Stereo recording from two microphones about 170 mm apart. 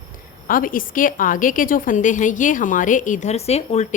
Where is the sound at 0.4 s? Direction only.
55° left (ahead or behind).